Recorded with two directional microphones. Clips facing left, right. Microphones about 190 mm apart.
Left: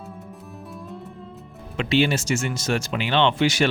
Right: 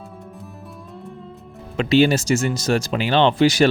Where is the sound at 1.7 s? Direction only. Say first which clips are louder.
Right 5 dB; 40° right (ahead or behind).